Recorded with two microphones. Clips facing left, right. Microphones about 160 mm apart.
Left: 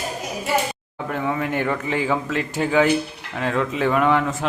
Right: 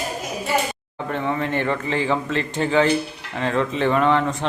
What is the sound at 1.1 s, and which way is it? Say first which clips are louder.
A man's voice: even; 5° left (ahead or behind).